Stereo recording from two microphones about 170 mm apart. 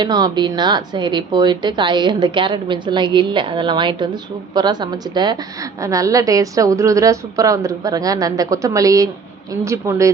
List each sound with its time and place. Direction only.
0.0 s a woman's voice: 25° right (ahead or behind)